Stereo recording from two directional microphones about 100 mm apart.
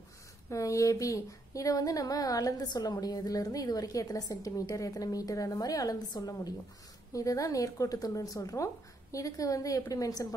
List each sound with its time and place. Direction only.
0.5 s speech: 30° left (ahead or behind)